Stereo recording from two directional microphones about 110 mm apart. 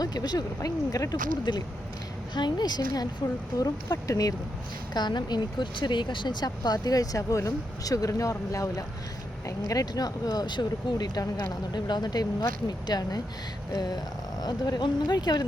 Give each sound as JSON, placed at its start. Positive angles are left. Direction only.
{"t": 0.0, "sound": "speech", "side_deg": 35}